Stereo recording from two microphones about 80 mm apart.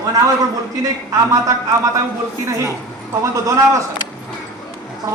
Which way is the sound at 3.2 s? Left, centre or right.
Right.